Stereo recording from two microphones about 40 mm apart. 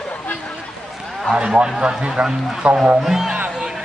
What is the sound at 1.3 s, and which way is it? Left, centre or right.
A man's voice, right.